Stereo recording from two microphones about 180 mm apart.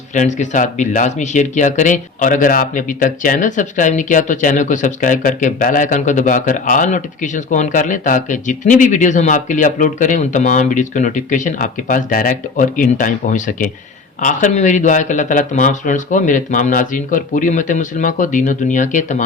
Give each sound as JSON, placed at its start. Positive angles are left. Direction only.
{"t": 0.1, "sound": "speech", "side_deg": 40}